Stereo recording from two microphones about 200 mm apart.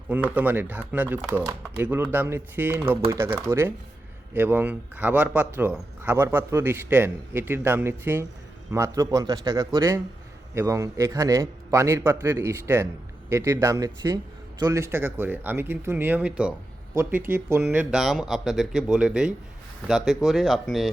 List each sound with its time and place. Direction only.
0.1 s speech: 5° right (ahead or behind)